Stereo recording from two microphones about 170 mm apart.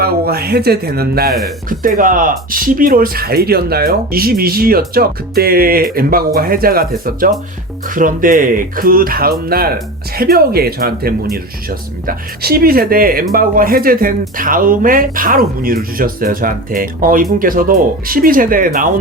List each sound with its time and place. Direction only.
0.0 s speech: 65° right (ahead or behind)